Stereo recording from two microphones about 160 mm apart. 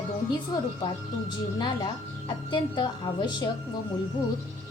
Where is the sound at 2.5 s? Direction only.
30° left (ahead or behind).